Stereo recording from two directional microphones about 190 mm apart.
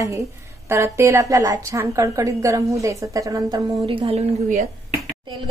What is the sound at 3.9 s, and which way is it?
Speech, 30° right (ahead or behind).